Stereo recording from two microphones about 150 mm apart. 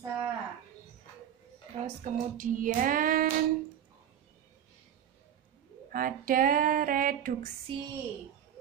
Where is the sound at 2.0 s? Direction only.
60° right (ahead or behind).